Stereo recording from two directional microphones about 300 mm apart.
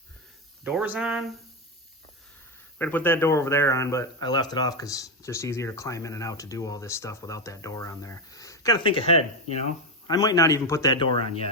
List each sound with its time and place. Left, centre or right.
0.6 s speech: centre
2.7 s speech: centre